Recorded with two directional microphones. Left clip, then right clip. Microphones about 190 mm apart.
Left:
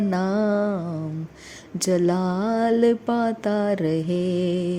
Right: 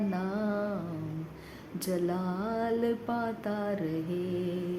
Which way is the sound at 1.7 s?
40° left (ahead or behind).